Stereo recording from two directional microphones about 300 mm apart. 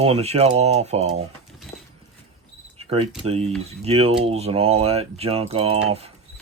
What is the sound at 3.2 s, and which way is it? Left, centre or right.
Speech, centre.